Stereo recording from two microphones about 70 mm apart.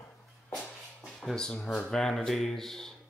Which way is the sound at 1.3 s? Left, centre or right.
Centre.